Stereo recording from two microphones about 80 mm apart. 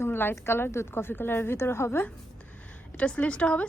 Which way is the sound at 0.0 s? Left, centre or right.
Left.